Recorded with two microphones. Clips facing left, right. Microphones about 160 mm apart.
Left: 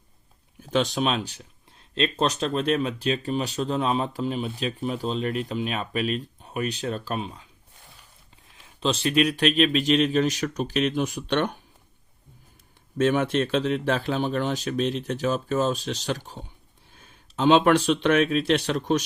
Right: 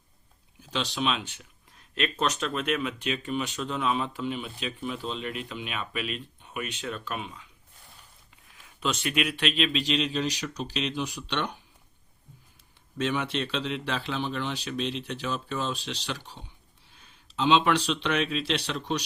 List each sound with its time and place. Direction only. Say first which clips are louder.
0.6 s speech: left 6 dB; 50° left (ahead or behind)
8.6 s speech: left 5 dB; 30° left (ahead or behind); by 11.5 s 50° left (ahead or behind)
13.0 s speech: left 7 dB; 50° left (ahead or behind)